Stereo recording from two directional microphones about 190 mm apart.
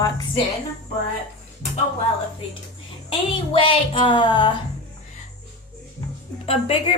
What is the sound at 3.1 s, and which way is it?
A woman's voice, 25° left (ahead or behind).